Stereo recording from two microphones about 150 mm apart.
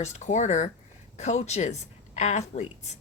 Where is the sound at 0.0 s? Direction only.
50° left (ahead or behind).